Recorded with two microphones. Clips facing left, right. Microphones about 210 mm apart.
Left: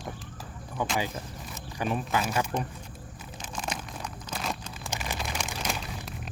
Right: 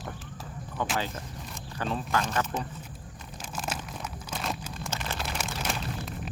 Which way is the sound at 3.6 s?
5° right (ahead or behind).